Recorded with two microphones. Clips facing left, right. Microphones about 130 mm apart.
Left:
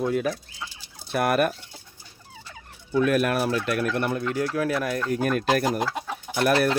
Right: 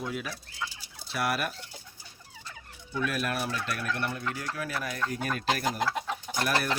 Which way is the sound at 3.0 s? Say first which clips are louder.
Left 8 dB; 55° left (ahead or behind).